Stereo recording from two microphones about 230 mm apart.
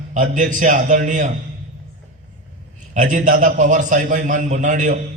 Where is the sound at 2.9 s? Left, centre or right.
Right.